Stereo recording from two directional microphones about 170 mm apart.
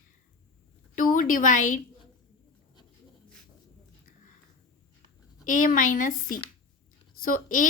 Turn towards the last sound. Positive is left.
turn(degrees=55)  # may be behind; listen again after turning